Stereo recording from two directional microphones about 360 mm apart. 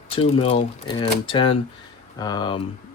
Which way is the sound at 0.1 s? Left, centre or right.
Centre.